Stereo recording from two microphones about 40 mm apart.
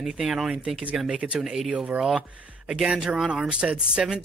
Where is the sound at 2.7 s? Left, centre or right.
Centre.